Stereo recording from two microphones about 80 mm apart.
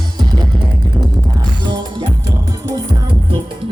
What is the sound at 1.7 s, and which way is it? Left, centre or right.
Music, right.